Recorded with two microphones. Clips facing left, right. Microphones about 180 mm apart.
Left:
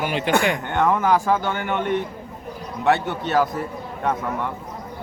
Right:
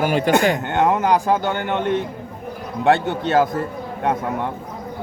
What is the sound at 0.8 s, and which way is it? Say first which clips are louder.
A man's voice: even; 20° right (ahead or behind).